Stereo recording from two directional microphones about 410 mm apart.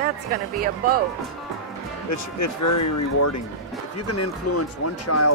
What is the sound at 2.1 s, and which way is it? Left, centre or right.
Speech, left.